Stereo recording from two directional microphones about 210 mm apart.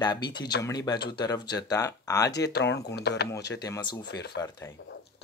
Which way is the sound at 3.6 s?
20° left (ahead or behind).